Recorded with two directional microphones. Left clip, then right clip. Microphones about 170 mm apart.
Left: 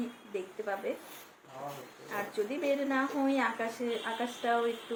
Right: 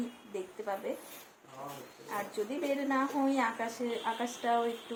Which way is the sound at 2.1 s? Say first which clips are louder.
Left 2 dB; 10° right (ahead or behind).